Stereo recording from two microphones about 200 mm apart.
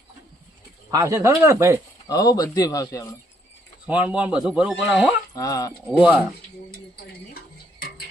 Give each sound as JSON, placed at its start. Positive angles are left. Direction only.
{"t": 0.9, "sound": "speech", "side_deg": -15}
{"t": 2.0, "sound": "speech", "side_deg": 20}
{"t": 3.8, "sound": "a man's voice", "side_deg": -5}
{"t": 5.3, "sound": "speech", "side_deg": 15}
{"t": 5.8, "sound": "speech", "side_deg": -5}
{"t": 7.3, "sound": "a sound", "side_deg": 50}